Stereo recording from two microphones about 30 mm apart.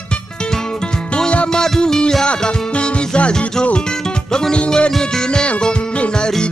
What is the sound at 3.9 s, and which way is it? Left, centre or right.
Music, left.